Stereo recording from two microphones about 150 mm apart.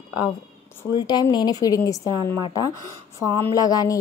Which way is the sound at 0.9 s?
30° left (ahead or behind).